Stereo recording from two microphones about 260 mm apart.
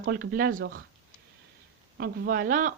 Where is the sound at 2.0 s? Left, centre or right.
Right.